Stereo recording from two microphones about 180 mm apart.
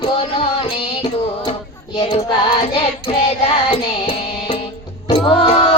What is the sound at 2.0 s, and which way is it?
Music, 30° left (ahead or behind).